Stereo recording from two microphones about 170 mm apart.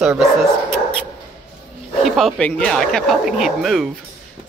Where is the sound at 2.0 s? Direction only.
Centre (ahead or behind).